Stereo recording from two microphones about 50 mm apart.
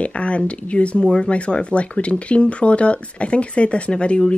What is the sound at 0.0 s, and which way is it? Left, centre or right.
Speech, left.